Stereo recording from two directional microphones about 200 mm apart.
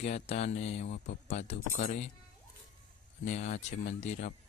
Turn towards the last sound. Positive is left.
turn(degrees=35)  # may be behind; listen again after turning